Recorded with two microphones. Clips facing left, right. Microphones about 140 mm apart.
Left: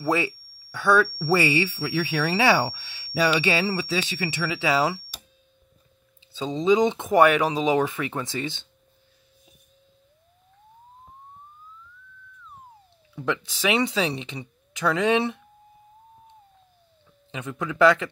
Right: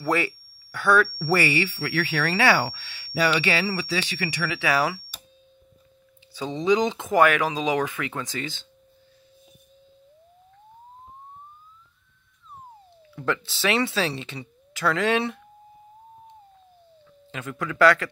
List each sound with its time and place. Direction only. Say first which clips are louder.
0.0 s speech: even; 20° left (ahead or behind)
6.3 s speech: left 2 dB; 20° left (ahead or behind)
13.1 s speech: even; 15° left (ahead or behind)
17.3 s speech: left 1 dB; 20° left (ahead or behind)